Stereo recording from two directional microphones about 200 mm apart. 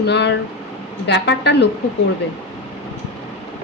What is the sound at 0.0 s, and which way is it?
A woman's voice, 60° left (ahead or behind).